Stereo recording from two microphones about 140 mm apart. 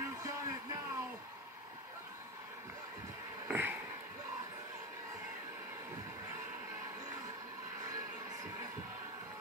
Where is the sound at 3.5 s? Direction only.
15° right (ahead or behind).